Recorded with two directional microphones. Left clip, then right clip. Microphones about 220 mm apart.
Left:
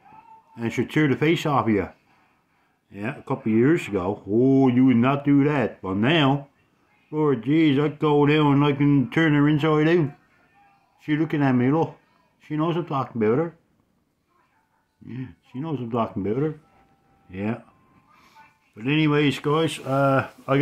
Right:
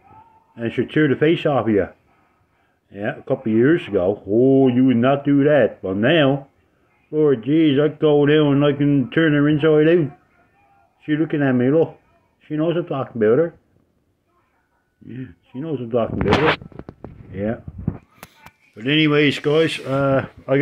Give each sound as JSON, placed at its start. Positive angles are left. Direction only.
{"t": 0.6, "sound": "speech", "side_deg": 10}
{"t": 2.9, "sound": "speech", "side_deg": 10}
{"t": 11.1, "sound": "speech", "side_deg": 15}
{"t": 15.0, "sound": "speech", "side_deg": 15}
{"t": 17.3, "sound": "speech", "side_deg": 10}
{"t": 18.8, "sound": "speech", "side_deg": 10}